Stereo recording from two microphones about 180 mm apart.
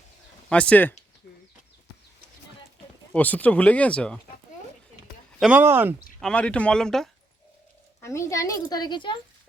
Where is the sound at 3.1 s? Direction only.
10° left (ahead or behind).